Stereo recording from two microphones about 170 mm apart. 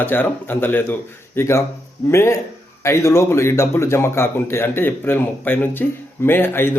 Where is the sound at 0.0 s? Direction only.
10° left (ahead or behind).